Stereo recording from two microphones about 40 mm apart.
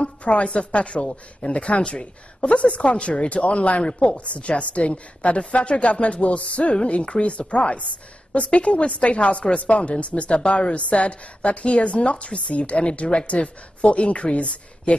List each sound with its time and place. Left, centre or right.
0.0 s a woman's voice: left